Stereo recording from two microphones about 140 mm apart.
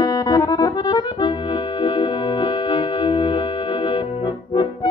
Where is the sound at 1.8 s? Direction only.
35° left (ahead or behind).